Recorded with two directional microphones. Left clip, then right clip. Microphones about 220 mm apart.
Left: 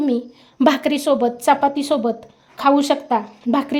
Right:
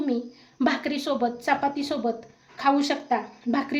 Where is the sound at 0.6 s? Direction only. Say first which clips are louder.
Left 9 dB; 35° left (ahead or behind).